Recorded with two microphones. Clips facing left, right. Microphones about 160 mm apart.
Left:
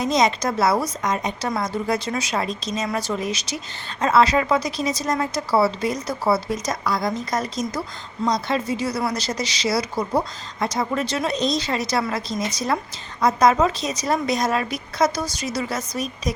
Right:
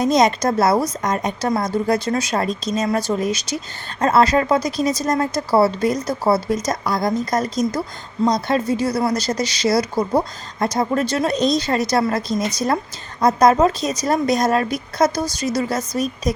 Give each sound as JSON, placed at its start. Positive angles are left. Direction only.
{"t": 0.0, "sound": "a woman's voice", "side_deg": -45}